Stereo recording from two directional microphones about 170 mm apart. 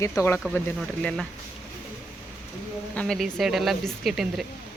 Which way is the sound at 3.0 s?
5° left (ahead or behind).